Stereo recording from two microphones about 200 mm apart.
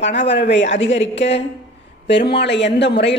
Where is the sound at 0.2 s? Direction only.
60° left (ahead or behind).